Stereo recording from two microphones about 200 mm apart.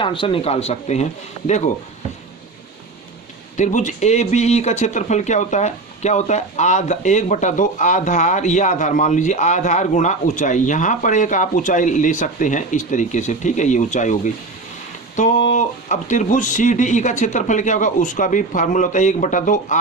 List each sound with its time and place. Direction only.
0.0 s speech: 25° left (ahead or behind)
3.6 s speech: 40° left (ahead or behind)